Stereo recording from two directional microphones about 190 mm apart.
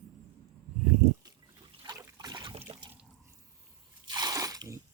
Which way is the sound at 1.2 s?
20° right (ahead or behind).